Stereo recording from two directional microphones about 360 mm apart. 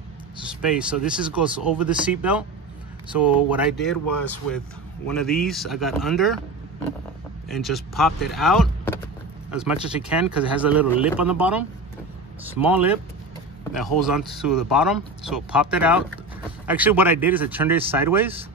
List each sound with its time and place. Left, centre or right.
0.7 s speech: centre
5.0 s speech: centre
7.4 s speech: centre